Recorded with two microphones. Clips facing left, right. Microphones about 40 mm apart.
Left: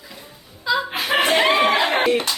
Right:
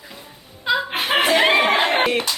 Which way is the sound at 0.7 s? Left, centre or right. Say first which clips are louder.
Right 1 dB; right.